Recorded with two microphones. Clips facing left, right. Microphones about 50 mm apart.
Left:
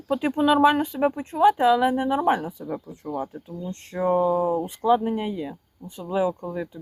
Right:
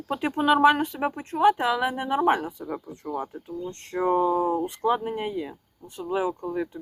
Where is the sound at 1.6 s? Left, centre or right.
Centre.